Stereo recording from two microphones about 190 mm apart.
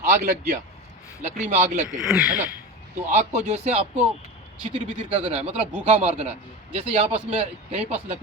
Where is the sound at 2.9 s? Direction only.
40° right (ahead or behind).